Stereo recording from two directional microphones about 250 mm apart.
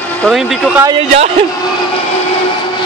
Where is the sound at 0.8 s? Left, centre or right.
Right.